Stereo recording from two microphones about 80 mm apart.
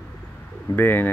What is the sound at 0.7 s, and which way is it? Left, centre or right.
Speech, left.